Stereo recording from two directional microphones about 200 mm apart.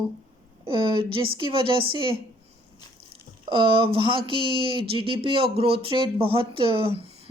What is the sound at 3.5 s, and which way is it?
Speech, 25° right (ahead or behind).